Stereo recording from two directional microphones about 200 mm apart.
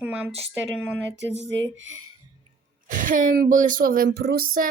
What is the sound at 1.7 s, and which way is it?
Speech, 70° right (ahead or behind).